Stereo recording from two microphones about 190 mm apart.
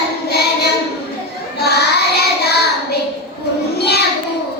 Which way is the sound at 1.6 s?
60° left (ahead or behind).